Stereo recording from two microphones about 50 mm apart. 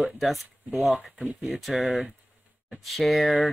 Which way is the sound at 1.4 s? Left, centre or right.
Centre.